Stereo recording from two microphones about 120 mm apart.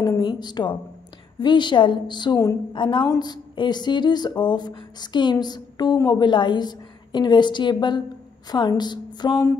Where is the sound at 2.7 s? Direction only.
45° left (ahead or behind).